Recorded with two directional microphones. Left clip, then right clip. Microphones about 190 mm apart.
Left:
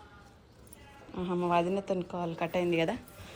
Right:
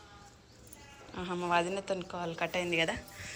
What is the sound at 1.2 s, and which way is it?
A woman's voice, 10° left (ahead or behind).